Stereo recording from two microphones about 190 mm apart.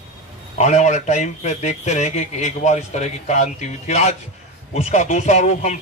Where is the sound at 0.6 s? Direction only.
40° left (ahead or behind).